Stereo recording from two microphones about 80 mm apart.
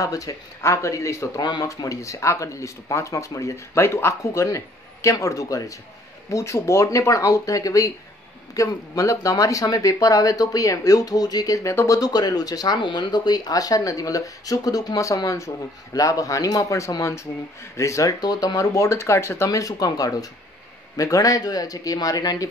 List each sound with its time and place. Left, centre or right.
0.0 s speech: left
12.7 s speech: left
18.2 s speech: left